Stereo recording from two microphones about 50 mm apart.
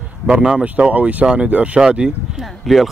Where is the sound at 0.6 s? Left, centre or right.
Right.